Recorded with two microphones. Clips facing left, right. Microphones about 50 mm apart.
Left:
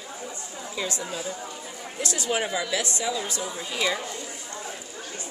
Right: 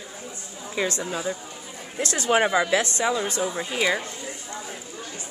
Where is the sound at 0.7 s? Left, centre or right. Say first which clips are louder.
Right 5 dB; right.